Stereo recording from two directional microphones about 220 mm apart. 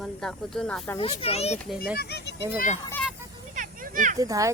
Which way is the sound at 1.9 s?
45° left (ahead or behind).